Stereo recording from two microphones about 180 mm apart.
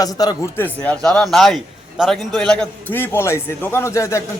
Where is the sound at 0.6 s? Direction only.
5° left (ahead or behind).